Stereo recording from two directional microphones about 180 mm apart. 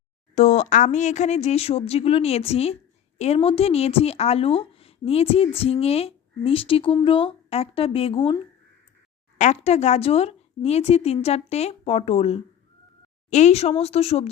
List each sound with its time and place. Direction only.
0.3 s speech: 40° left (ahead or behind)